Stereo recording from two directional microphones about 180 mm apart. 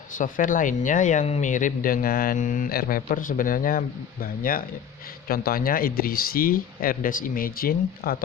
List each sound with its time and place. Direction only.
0.2 s speech: 45° left (ahead or behind)